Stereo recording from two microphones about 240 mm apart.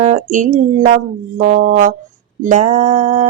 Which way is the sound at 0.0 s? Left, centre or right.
Right.